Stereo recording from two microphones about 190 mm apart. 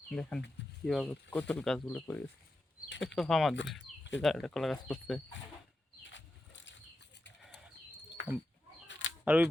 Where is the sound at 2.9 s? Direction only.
75° left (ahead or behind).